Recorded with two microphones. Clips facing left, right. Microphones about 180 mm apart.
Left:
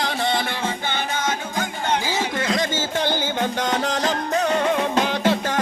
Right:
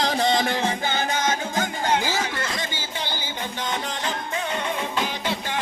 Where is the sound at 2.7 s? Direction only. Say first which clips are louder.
Left 9 dB; 50° left (ahead or behind).